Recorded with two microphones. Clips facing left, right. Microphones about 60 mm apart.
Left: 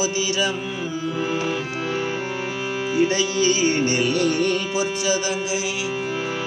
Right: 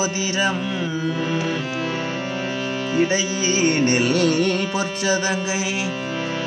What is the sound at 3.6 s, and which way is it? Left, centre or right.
Music, right.